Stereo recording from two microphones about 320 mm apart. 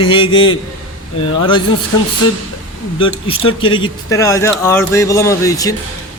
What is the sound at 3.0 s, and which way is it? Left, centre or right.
A man's voice, centre.